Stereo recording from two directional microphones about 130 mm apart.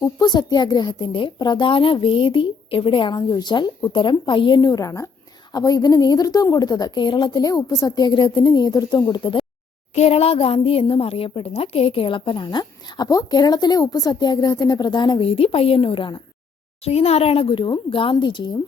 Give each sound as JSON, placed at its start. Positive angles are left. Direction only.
{"t": 0.0, "sound": "a woman's voice", "side_deg": 35}
{"t": 9.9, "sound": "a woman's voice", "side_deg": 50}
{"t": 16.8, "sound": "a woman's voice", "side_deg": 50}